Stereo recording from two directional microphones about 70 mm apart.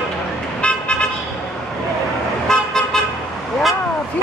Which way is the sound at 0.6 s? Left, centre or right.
Centre.